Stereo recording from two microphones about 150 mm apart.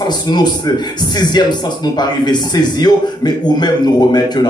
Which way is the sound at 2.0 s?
30° left (ahead or behind).